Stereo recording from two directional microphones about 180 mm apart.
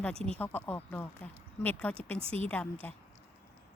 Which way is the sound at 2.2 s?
30° right (ahead or behind).